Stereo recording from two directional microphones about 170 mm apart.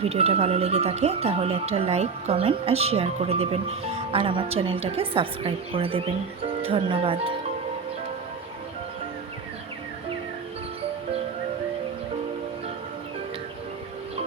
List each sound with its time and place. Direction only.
0.0 s speech: 35° right (ahead or behind)